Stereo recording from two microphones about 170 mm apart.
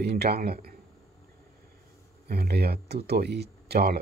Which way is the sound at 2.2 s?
70° right (ahead or behind).